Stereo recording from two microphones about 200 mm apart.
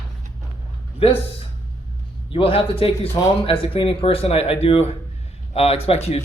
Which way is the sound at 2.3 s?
25° left (ahead or behind).